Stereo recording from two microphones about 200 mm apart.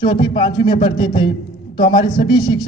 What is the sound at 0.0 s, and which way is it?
A man's voice, 25° left (ahead or behind).